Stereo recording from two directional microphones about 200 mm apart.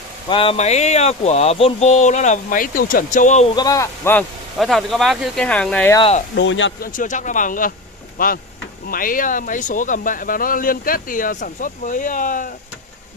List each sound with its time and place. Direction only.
0.3 s speech: 25° left (ahead or behind)
3.5 s speech: 15° left (ahead or behind)
4.6 s speech: centre (ahead or behind)
6.3 s speech: 65° left (ahead or behind)
6.8 s speech: 40° left (ahead or behind)